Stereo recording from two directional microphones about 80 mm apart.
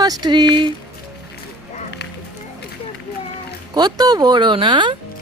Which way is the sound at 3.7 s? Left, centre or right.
Right.